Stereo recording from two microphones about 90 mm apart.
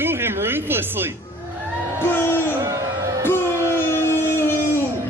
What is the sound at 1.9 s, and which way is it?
Crowd, 25° left (ahead or behind).